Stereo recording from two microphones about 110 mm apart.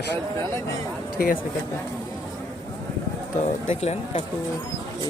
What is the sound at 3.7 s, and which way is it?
Speech, 75° left (ahead or behind).